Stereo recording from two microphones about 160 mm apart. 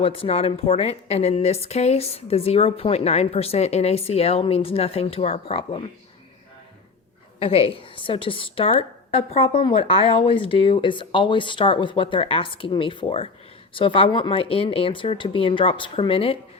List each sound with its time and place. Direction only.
0.0 s a woman's voice: 35° left (ahead or behind)
7.3 s a woman's voice: 35° left (ahead or behind)